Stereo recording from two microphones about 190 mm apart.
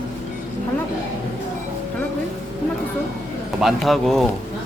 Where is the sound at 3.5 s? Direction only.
Centre (ahead or behind).